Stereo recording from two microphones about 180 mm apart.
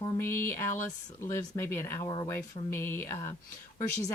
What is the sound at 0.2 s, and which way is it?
Speech, 15° left (ahead or behind).